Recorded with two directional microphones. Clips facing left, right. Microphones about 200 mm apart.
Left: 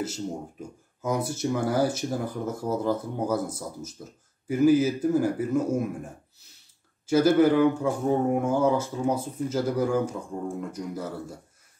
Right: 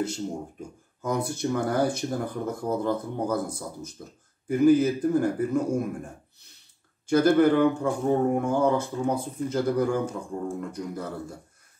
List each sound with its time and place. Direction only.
0.0 s speech: 5° left (ahead or behind)
7.1 s speech: 5° left (ahead or behind)